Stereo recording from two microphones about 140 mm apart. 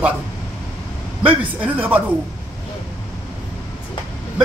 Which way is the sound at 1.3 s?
10° right (ahead or behind).